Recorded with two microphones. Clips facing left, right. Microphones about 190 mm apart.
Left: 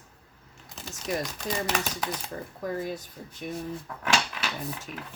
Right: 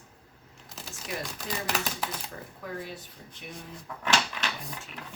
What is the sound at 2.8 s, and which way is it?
Speech, 40° left (ahead or behind).